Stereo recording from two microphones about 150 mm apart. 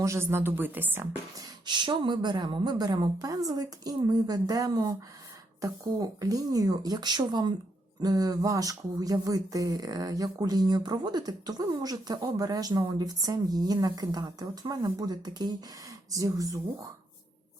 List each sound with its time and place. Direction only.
0.0 s a woman's voice: 20° right (ahead or behind)
1.6 s speech: 30° right (ahead or behind)